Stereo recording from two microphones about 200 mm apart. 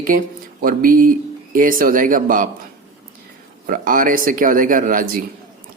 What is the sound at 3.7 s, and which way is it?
Speech, 45° right (ahead or behind).